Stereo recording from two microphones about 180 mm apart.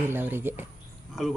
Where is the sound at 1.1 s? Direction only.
Centre (ahead or behind).